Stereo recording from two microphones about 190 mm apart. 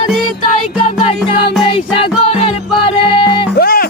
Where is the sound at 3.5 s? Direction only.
55° left (ahead or behind).